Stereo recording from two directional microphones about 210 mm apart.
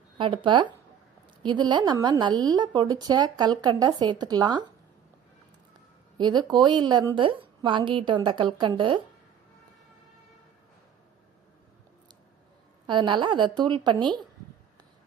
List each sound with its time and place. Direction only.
0.2 s a woman's voice: 25° right (ahead or behind)
6.1 s a woman's voice: 20° right (ahead or behind)
12.9 s a woman's voice: 20° right (ahead or behind)